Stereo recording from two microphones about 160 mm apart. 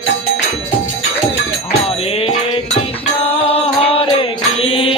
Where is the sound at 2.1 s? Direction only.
40° left (ahead or behind).